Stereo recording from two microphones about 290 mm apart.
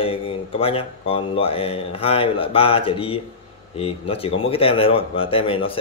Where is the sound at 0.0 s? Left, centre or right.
Centre.